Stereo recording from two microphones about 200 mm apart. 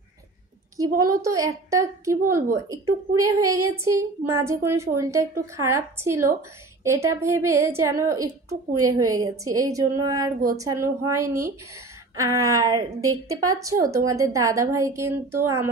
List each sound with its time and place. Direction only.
0.9 s a woman's voice: 15° right (ahead or behind)